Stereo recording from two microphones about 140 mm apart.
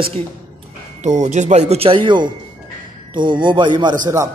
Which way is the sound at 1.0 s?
55° right (ahead or behind).